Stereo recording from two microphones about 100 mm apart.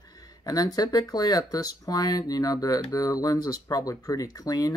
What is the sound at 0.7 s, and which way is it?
Speech, 40° left (ahead or behind).